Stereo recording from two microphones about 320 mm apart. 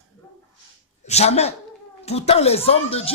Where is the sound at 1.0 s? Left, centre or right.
Centre.